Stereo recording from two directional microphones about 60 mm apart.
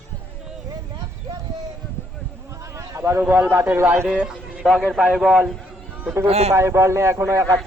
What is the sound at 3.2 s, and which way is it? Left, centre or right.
Speech, right.